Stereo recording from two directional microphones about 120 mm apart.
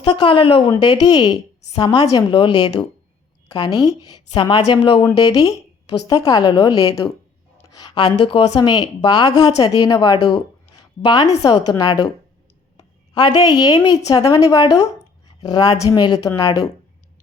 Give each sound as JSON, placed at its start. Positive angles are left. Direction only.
{"t": 0.0, "sound": "a woman's voice", "side_deg": 40}
{"t": 0.7, "sound": "a woman's voice", "side_deg": 35}
{"t": 5.1, "sound": "a woman's voice", "side_deg": 30}